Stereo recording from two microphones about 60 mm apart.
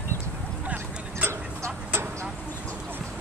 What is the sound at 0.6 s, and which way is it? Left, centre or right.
Dog, right.